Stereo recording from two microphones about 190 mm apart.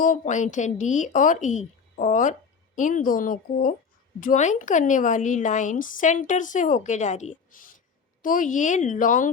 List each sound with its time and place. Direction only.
0.0 s a woman's voice: 40° left (ahead or behind)